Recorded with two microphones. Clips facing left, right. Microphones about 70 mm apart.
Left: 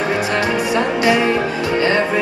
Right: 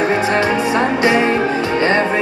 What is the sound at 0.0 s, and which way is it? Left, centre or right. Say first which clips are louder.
Music: right 3 dB; right.